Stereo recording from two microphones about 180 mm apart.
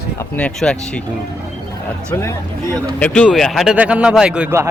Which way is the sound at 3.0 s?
5° left (ahead or behind).